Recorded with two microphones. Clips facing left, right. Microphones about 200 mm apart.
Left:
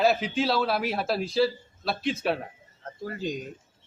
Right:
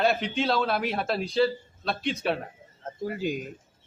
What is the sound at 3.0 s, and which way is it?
Speech, 10° right (ahead or behind).